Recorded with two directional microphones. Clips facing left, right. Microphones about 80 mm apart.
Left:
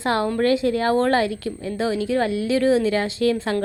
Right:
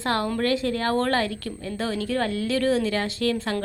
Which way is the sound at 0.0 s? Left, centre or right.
Left.